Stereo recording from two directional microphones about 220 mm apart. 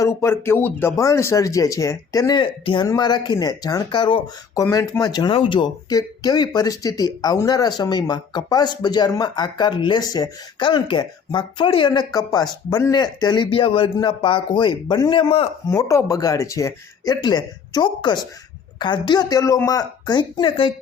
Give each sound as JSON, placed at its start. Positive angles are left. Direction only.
{"t": 0.0, "sound": "speech", "side_deg": 10}
{"t": 15.7, "sound": "speech", "side_deg": 15}